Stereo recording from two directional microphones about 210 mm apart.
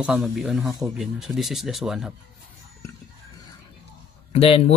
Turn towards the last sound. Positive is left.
turn(degrees=30)  # may be behind; listen again after turning